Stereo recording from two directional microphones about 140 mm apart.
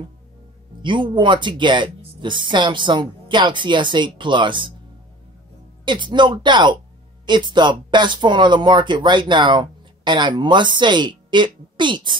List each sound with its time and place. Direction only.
0.8 s speech: 35° right (ahead or behind)
5.9 s speech: 35° right (ahead or behind)